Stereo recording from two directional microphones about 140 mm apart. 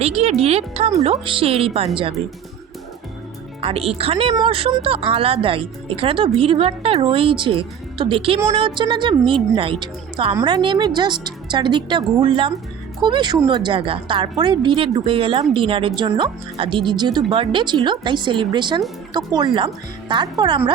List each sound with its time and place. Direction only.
0.0 s speech: 50° right (ahead or behind)
3.6 s a woman's voice: 45° right (ahead or behind)